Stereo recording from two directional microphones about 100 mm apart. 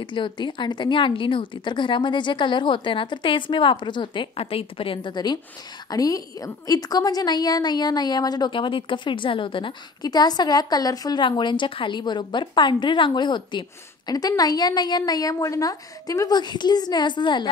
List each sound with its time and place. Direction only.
0.0 s a woman's voice: 55° left (ahead or behind)
10.0 s a woman's voice: 40° left (ahead or behind)
11.1 s a woman's voice: 55° left (ahead or behind)